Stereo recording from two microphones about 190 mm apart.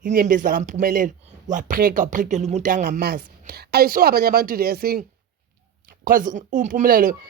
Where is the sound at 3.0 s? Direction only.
55° right (ahead or behind).